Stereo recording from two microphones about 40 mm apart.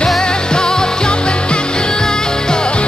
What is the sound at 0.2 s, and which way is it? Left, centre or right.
Music, left.